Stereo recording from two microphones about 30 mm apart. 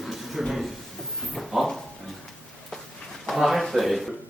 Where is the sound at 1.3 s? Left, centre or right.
Centre.